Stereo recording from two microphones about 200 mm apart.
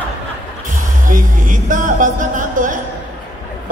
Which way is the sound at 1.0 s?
40° right (ahead or behind).